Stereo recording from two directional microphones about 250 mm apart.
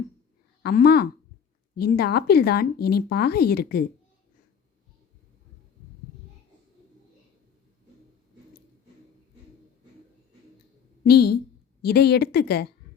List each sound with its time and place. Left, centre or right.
0.6 s a woman's voice: left
11.0 s speech: left